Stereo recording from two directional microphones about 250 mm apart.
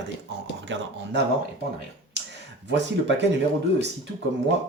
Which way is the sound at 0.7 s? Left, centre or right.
Right.